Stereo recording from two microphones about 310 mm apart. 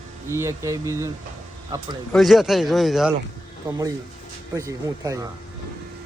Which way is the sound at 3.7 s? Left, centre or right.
Centre.